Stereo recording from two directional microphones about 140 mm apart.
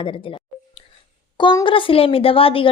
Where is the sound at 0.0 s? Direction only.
40° left (ahead or behind).